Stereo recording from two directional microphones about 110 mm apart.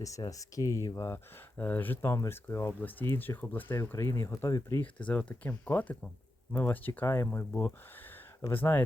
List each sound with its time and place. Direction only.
0.0 s speech: 30° left (ahead or behind)
4.8 s speech: 15° left (ahead or behind)